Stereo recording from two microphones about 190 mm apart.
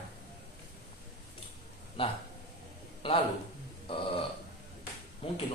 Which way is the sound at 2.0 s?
25° left (ahead or behind).